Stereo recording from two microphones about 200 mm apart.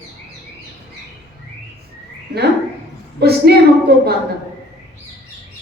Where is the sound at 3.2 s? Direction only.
55° right (ahead or behind).